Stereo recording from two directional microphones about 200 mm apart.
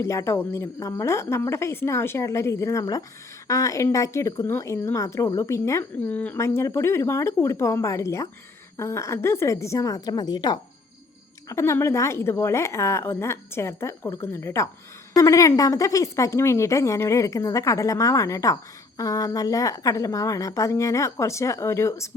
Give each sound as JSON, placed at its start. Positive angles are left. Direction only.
{"t": 0.0, "sound": "speech", "side_deg": 15}